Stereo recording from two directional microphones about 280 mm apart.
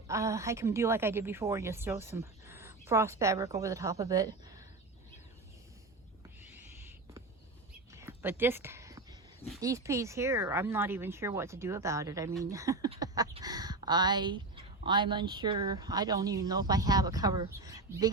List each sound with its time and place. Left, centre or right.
0.1 s speech: centre
6.4 s owl: centre
7.9 s a sound: centre
9.6 s speech: centre